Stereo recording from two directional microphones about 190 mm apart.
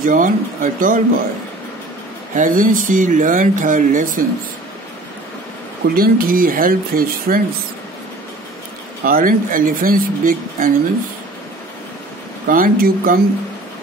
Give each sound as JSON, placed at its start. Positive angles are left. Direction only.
{"t": 0.0, "sound": "speech", "side_deg": -45}
{"t": 2.3, "sound": "speech", "side_deg": -45}
{"t": 5.9, "sound": "speech", "side_deg": -50}
{"t": 9.0, "sound": "speech", "side_deg": -45}
{"t": 12.4, "sound": "speech", "side_deg": -45}